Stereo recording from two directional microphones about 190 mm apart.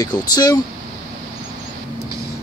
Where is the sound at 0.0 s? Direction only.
20° left (ahead or behind).